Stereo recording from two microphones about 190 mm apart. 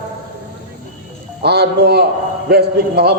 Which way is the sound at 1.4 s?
60° right (ahead or behind).